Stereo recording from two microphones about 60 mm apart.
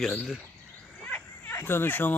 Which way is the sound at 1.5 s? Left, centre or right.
Left.